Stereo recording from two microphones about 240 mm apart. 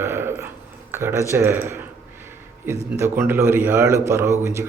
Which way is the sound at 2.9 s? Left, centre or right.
Centre.